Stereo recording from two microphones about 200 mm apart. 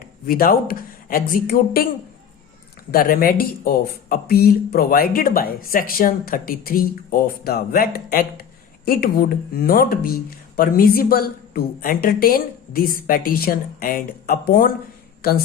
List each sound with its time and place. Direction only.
0.0 s speech: 45° left (ahead or behind)
2.9 s speech: 45° left (ahead or behind)